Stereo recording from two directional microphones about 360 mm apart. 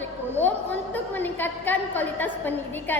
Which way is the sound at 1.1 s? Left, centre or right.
Centre.